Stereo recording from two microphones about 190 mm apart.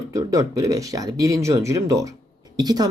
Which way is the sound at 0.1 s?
15° right (ahead or behind).